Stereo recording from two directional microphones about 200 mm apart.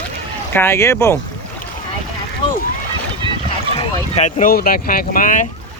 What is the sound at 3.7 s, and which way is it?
Speech, 35° left (ahead or behind).